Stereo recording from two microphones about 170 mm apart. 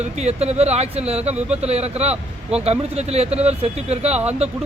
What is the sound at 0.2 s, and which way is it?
Speech, 40° right (ahead or behind).